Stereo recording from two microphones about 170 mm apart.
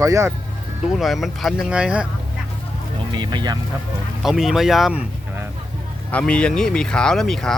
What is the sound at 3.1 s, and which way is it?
Speech, 25° right (ahead or behind).